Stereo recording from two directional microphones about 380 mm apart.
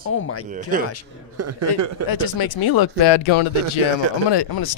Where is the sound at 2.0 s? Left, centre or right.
Left.